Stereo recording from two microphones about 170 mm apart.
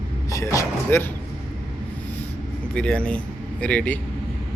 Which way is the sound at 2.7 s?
5° left (ahead or behind).